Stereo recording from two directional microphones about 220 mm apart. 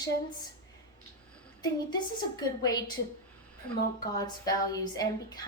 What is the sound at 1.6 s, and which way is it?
A woman's voice, 20° left (ahead or behind).